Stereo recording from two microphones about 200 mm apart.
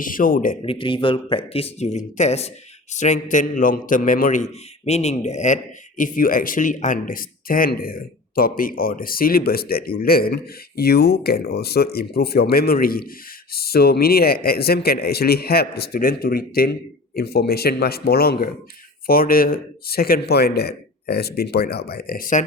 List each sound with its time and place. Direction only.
0.0 s speech: 45° left (ahead or behind)
0.6 s a man's voice: 25° left (ahead or behind); by 22.4 s 40° left (ahead or behind)